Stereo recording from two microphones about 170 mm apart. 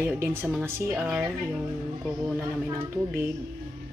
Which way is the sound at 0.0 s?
15° right (ahead or behind).